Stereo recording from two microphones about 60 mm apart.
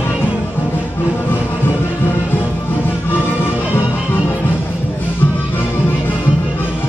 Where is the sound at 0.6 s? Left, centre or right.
Left.